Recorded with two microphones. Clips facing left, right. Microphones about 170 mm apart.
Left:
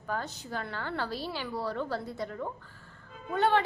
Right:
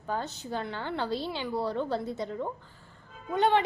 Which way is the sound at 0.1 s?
25° right (ahead or behind).